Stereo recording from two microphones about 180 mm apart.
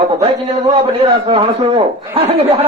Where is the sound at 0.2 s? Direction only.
35° right (ahead or behind).